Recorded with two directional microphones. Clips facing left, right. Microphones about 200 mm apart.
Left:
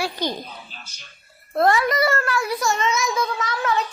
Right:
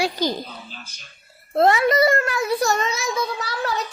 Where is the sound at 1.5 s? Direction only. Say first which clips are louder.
Right 2 dB; 25° right (ahead or behind).